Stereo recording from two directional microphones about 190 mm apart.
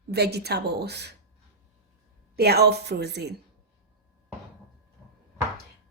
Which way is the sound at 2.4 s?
55° right (ahead or behind).